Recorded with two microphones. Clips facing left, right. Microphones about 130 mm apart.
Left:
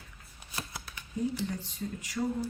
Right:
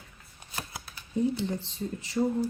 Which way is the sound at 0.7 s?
25° right (ahead or behind).